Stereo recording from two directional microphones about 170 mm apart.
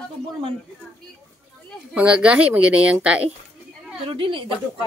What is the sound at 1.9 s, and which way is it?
A woman's voice, 5° right (ahead or behind).